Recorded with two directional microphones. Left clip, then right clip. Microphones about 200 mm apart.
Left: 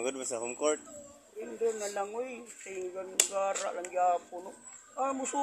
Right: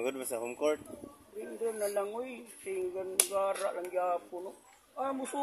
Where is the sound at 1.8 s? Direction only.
15° left (ahead or behind).